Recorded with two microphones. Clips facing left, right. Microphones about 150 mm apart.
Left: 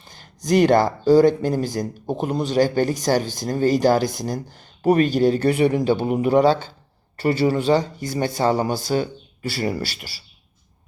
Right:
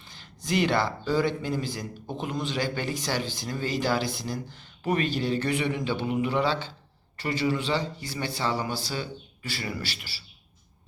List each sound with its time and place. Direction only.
0.0 s speech: 45° left (ahead or behind)